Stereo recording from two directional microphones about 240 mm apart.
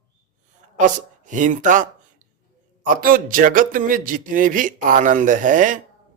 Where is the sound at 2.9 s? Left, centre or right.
Right.